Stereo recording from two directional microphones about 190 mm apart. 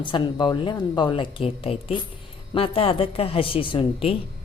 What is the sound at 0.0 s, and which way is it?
A woman's voice, 25° left (ahead or behind).